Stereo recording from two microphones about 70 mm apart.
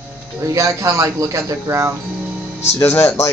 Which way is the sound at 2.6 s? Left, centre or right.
Left.